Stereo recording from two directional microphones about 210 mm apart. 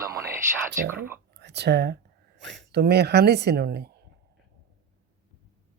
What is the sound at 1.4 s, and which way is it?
Speech, 55° right (ahead or behind).